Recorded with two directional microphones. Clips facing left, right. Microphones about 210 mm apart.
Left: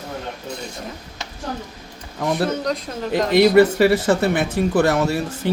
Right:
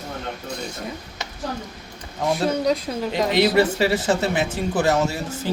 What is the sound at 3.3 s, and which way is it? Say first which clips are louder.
Speech: left 6 dB; 50° left (ahead or behind).